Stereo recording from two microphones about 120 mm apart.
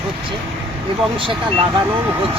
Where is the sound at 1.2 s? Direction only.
45° right (ahead or behind).